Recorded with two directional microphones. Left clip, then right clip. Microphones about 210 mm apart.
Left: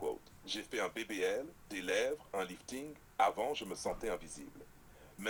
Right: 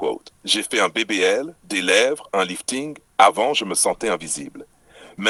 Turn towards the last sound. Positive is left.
turn(degrees=-40)  # may be behind; listen again after turning